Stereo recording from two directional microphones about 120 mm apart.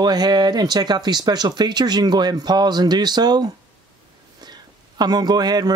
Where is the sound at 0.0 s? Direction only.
35° right (ahead or behind).